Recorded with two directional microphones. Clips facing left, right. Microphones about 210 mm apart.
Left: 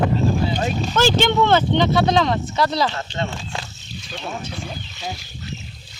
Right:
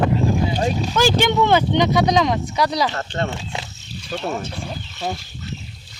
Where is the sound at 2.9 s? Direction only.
50° right (ahead or behind).